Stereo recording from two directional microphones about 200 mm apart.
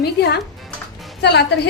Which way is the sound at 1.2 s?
55° left (ahead or behind).